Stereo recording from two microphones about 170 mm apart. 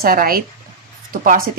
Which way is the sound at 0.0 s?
60° right (ahead or behind).